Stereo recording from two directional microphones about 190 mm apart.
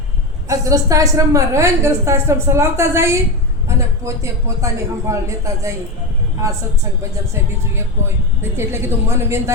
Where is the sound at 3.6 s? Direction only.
15° right (ahead or behind).